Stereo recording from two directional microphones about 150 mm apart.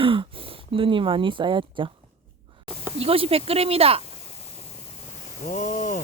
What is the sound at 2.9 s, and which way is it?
Speech, 40° right (ahead or behind).